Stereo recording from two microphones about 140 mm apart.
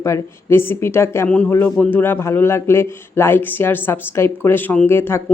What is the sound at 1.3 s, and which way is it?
Speech, 10° left (ahead or behind).